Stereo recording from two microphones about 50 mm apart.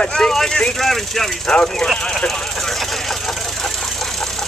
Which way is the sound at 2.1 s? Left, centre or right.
Centre.